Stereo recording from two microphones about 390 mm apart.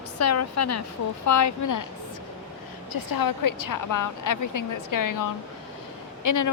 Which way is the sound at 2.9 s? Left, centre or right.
Left.